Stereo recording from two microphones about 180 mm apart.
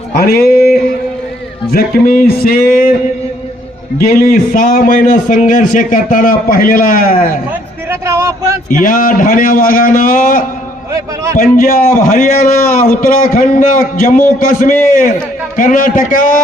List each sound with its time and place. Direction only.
0.2 s a sound: 60° left (ahead or behind)
1.7 s a man's voice: 55° left (ahead or behind)
4.0 s a man's voice: 55° left (ahead or behind)
7.9 s speech: 15° right (ahead or behind)
8.8 s a man's voice: 50° left (ahead or behind)
10.9 s speech: 15° right (ahead or behind)
11.3 s a man's voice: 50° left (ahead or behind)